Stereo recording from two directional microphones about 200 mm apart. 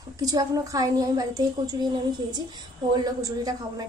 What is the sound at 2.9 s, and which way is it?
Speech, 20° right (ahead or behind).